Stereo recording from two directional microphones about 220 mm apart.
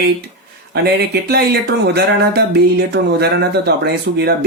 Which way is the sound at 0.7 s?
50° right (ahead or behind).